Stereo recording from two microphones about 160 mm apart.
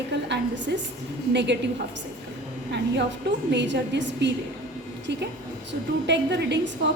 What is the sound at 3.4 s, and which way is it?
Speech, 90° right.